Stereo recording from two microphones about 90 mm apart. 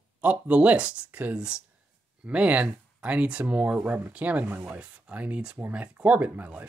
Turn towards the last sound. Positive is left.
turn(degrees=-15)  # may be behind; listen again after turning